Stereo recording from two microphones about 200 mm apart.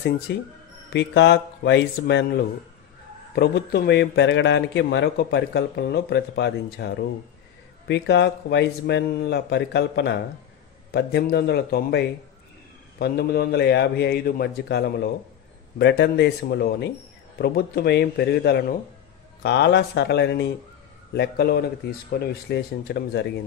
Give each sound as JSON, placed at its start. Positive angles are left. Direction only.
{"t": 0.3, "sound": "a man's voice", "side_deg": 60}
{"t": 7.9, "sound": "a man's voice", "side_deg": 60}
{"t": 13.0, "sound": "a man's voice", "side_deg": 50}